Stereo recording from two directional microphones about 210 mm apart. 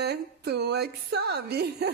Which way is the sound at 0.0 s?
50° right (ahead or behind).